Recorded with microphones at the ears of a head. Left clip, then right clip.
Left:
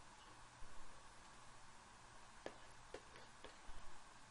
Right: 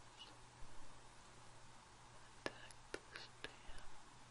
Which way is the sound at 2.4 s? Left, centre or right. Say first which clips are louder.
Right 6 dB; right.